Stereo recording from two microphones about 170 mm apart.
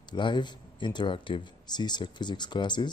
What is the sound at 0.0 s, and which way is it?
Speech, 25° left (ahead or behind).